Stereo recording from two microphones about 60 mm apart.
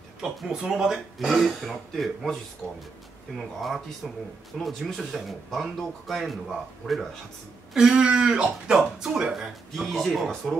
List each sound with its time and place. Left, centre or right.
0.2 s speech: centre
3.3 s speech: centre
7.7 s speech: centre
9.7 s speech: centre